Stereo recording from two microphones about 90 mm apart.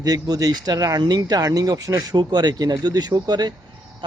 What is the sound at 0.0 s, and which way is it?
Speech, 45° right (ahead or behind).